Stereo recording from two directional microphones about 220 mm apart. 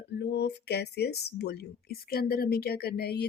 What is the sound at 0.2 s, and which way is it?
Speech, 50° left (ahead or behind).